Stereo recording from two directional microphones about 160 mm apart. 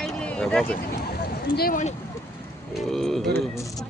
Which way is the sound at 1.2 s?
75° left (ahead or behind).